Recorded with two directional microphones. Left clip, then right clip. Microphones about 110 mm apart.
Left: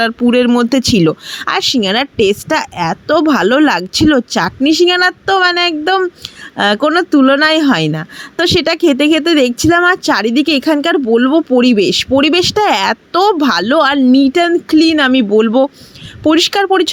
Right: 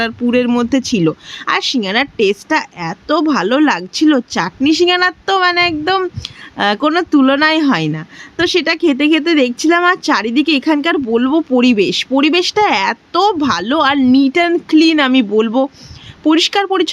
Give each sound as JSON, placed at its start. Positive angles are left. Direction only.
{"t": 0.0, "sound": "speech", "side_deg": 55}